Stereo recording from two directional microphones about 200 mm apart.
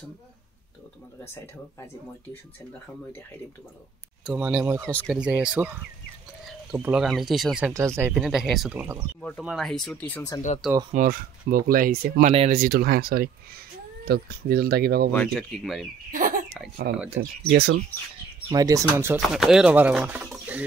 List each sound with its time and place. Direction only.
1.2 s speech: 10° left (ahead or behind)
4.2 s speech: 5° right (ahead or behind)
7.7 s speech: 15° right (ahead or behind); by 10.4 s 15° left (ahead or behind)
10.9 s speech: 45° right (ahead or behind)
12.3 s speech: 35° right (ahead or behind)
15.1 s speech: centre (ahead or behind)
16.1 s a sound: 40° right (ahead or behind)
16.9 s speech: 50° right (ahead or behind)
18.5 s speech: 15° right (ahead or behind)
19.1 s speech: centre (ahead or behind)